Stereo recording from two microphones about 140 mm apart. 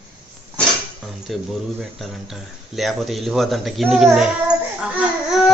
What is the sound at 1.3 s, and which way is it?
Speech, centre (ahead or behind).